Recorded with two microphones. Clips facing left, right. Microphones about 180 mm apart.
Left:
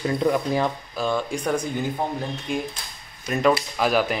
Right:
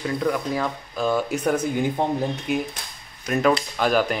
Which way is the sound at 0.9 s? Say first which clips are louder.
Right 2 dB; centre (ahead or behind).